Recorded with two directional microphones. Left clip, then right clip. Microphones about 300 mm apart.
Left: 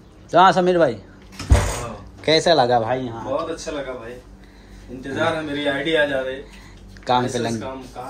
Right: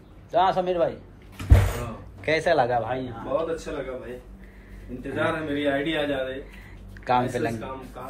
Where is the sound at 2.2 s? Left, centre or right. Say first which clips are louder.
Left 6 dB; centre.